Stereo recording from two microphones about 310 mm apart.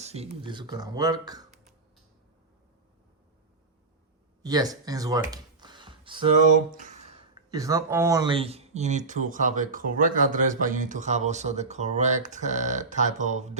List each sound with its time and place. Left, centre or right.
0.0 s speech: centre
4.4 s speech: centre